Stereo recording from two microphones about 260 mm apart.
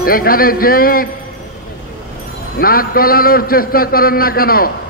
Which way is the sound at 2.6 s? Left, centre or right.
Left.